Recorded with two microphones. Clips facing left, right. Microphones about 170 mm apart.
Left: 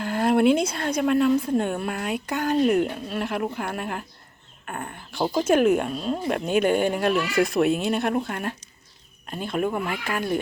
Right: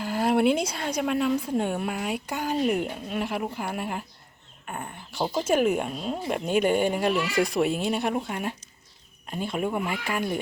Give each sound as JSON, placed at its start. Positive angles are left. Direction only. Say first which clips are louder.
{"t": 0.0, "sound": "a sound", "louder": "left 3 dB", "side_deg": -10}
{"t": 0.7, "sound": "speech", "louder": "left 4 dB", "side_deg": -10}
{"t": 7.6, "sound": "speech", "louder": "left 3 dB", "side_deg": 55}
{"t": 7.9, "sound": "speech", "louder": "left 3 dB", "side_deg": -10}